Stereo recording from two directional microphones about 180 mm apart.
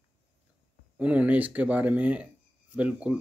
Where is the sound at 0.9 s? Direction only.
10° right (ahead or behind).